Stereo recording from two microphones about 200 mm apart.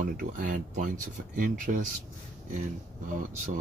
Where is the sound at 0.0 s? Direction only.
40° right (ahead or behind).